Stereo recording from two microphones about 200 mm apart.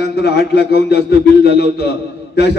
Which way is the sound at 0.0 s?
55° left (ahead or behind).